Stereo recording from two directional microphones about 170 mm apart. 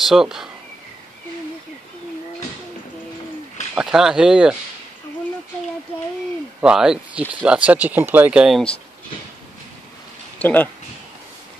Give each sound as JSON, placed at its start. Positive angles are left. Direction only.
{"t": 0.0, "sound": "speech", "side_deg": 0}
{"t": 3.7, "sound": "speech", "side_deg": -5}
{"t": 6.6, "sound": "speech", "side_deg": -5}
{"t": 10.4, "sound": "speech", "side_deg": 10}